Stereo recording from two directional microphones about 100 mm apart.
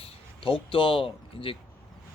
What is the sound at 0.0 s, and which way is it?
Speech, 65° left (ahead or behind).